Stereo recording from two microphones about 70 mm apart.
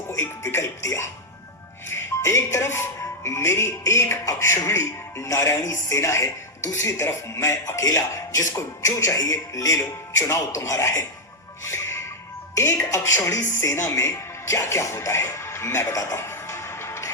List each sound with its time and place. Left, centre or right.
0.1 s speech: left
11.6 s music: left
12.5 s speech: left